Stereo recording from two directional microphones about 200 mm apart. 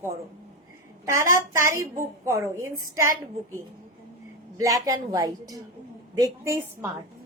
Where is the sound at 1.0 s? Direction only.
15° right (ahead or behind).